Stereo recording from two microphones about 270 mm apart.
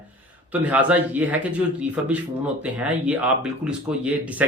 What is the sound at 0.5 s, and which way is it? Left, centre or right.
Speech, centre.